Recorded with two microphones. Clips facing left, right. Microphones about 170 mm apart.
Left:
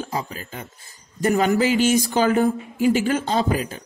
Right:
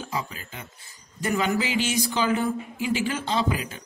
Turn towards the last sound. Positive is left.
turn(degrees=45)  # may be behind; listen again after turning